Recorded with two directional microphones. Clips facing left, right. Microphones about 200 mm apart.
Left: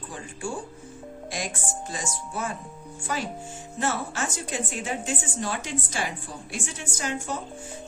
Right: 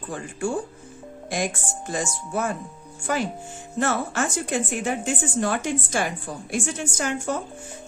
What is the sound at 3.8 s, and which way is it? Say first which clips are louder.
A woman's voice: right 5 dB; 55° right (ahead or behind).